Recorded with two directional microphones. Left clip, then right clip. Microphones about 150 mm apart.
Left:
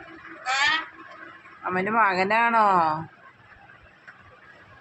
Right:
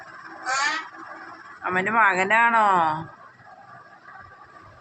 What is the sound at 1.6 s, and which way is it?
Speech, centre (ahead or behind).